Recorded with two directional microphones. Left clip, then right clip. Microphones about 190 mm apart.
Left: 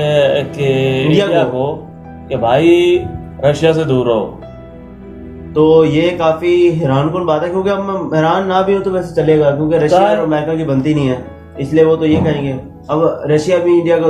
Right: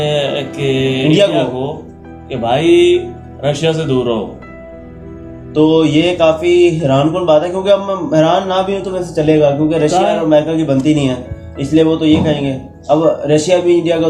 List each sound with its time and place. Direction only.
0.0 s mantra: 10° left (ahead or behind)
1.4 s speech: 10° left (ahead or behind)
5.5 s speech: 15° right (ahead or behind)